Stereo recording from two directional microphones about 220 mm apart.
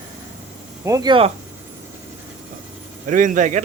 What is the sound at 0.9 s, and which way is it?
Speech, 15° right (ahead or behind).